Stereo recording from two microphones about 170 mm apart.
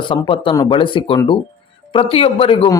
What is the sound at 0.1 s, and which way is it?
Speech, 30° left (ahead or behind).